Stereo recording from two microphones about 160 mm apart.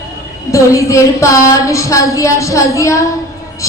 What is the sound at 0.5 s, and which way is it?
Speech, 20° left (ahead or behind).